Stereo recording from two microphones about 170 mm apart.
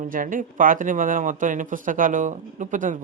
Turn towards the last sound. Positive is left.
turn(degrees=-50)  # may be behind; listen again after turning